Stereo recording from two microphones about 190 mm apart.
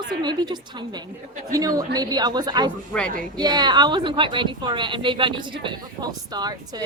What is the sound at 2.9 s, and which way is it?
Speech, 5° left (ahead or behind).